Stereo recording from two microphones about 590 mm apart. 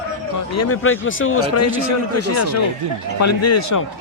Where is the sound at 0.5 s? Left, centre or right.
Left.